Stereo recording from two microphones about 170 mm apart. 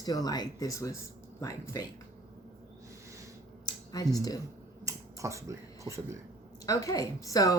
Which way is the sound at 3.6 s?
25° left (ahead or behind).